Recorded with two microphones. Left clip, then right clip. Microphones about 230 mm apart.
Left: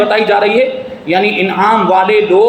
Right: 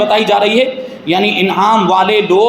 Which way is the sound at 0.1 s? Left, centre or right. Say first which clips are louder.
Even; right.